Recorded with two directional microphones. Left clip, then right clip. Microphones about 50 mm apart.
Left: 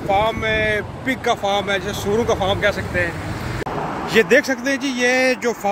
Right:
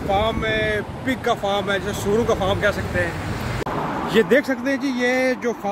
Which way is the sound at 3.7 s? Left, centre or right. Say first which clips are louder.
Even; centre.